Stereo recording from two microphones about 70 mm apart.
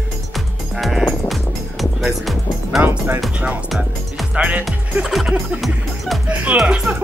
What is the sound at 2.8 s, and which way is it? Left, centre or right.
Speech, right.